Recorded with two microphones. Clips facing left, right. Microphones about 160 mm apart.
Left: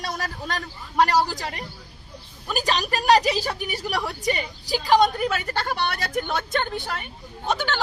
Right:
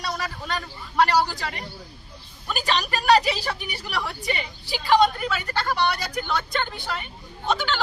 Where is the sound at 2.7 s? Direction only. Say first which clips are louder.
Even; 40° left (ahead or behind).